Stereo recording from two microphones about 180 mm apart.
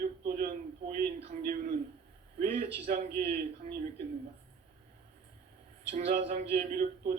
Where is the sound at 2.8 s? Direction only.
40° right (ahead or behind).